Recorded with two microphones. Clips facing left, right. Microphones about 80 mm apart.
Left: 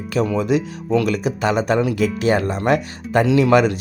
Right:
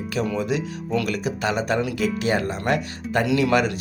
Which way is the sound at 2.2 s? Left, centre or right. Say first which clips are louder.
Left 5 dB; left.